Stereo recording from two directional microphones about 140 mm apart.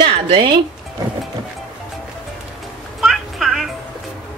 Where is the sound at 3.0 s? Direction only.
Centre (ahead or behind).